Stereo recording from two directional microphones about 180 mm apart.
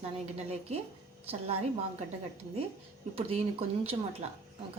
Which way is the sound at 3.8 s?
35° right (ahead or behind).